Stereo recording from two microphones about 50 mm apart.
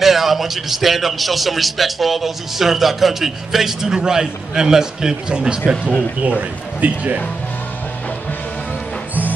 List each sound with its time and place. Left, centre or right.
0.0 s a man's voice: centre; by 7.2 s right